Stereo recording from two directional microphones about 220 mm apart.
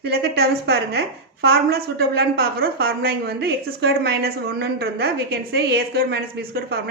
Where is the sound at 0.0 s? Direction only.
45° right (ahead or behind).